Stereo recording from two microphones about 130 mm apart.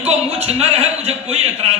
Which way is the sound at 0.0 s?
55° right (ahead or behind).